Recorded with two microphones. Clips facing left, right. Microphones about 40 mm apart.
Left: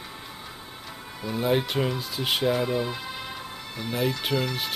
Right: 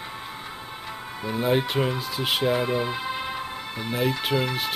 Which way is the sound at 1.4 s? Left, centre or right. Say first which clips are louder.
Right 1 dB; centre.